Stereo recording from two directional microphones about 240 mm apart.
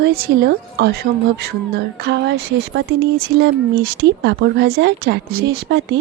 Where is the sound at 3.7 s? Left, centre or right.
Right.